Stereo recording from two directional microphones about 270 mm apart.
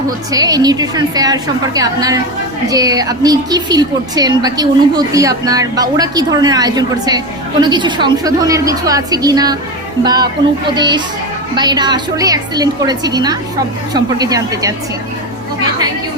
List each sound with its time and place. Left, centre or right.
0.3 s a woman's voice: centre